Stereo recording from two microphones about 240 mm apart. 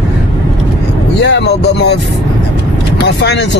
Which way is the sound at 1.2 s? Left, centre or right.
Left.